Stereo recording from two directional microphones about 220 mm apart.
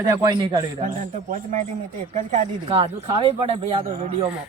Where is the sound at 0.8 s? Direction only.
35° right (ahead or behind).